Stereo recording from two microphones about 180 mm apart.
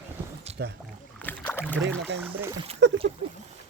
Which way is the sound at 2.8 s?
80° right.